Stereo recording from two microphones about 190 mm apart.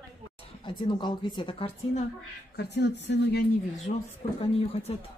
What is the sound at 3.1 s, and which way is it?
Speech, 60° left (ahead or behind).